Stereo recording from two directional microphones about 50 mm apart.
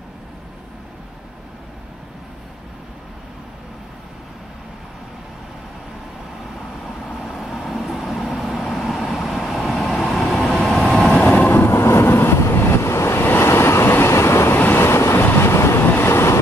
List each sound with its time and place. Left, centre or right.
7.1 s vehicle: centre
11.2 s train: left
11.6 s vehicle: left
13.2 s vehicle: left
15.2 s train: left
15.9 s vehicle: left